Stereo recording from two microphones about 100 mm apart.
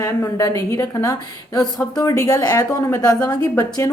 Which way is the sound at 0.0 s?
35° left (ahead or behind).